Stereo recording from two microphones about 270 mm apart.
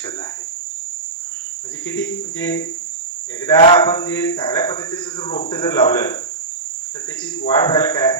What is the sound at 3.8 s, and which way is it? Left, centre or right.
Speech, centre.